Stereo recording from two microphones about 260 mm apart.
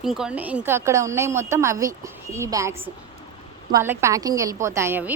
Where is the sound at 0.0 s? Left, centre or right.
Centre.